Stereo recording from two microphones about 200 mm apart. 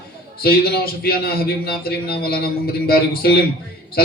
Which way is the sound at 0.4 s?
50° left (ahead or behind).